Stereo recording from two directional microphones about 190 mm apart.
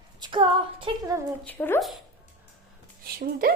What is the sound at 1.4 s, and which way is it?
Speech, 10° left (ahead or behind).